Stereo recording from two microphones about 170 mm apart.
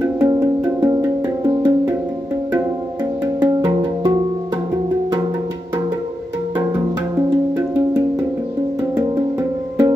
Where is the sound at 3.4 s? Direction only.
25° right (ahead or behind).